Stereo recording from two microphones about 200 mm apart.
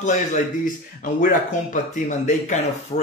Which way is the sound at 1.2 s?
40° left (ahead or behind).